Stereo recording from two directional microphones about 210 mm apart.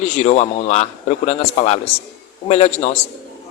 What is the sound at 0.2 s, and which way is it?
A man's voice, 30° left (ahead or behind).